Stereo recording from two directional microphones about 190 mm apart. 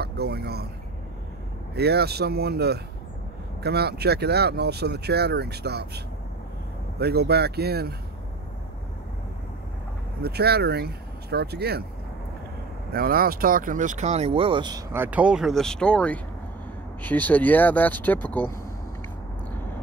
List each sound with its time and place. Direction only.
0.0 s a sound: 55° right (ahead or behind)
1.8 s speech: 60° right (ahead or behind)
10.2 s speech: 55° right (ahead or behind)
12.9 s speech: 50° right (ahead or behind); by 14.8 s 25° right (ahead or behind)
14.9 s speech: 10° right (ahead or behind); by 18.6 s 10° left (ahead or behind)